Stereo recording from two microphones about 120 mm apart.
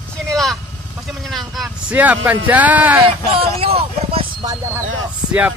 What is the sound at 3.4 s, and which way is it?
Speech, 50° right (ahead or behind).